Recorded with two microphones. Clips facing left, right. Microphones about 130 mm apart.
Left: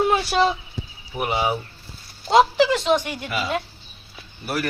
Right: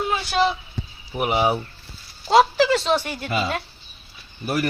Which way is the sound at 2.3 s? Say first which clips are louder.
Even; 15° left (ahead or behind).